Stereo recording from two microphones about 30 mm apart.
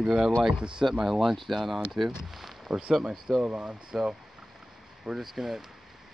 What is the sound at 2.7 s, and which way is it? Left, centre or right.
Speech, right.